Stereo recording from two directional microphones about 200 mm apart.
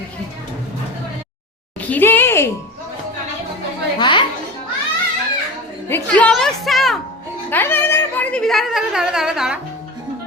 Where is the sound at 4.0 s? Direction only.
25° left (ahead or behind).